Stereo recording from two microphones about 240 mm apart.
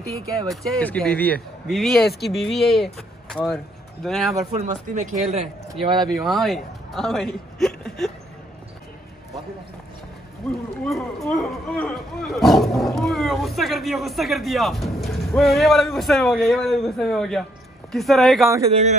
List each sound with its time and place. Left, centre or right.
0.5 s speech: centre
4.6 s speech: right
5.9 s speech: centre
10.4 s speech: centre
18.7 s speech: right